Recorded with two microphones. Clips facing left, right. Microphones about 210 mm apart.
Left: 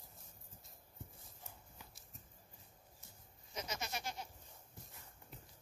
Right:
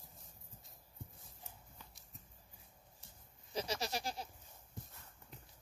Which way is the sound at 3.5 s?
30° right (ahead or behind).